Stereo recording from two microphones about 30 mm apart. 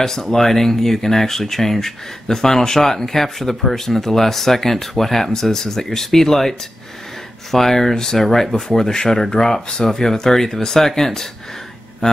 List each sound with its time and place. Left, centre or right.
0.0 s speech: centre
7.5 s speech: centre